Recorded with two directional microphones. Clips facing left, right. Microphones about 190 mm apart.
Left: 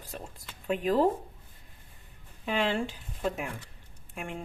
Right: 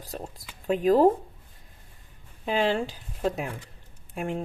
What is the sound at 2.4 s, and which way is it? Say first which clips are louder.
Speech: right 4 dB; 35° right (ahead or behind).